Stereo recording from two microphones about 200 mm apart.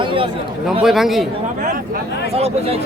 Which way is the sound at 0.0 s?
25° right (ahead or behind).